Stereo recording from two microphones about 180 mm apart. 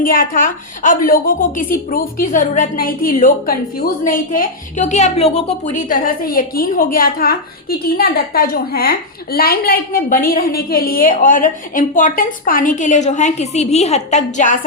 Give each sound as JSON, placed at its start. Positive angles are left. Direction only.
{"t": 0.0, "sound": "a woman's voice", "side_deg": 50}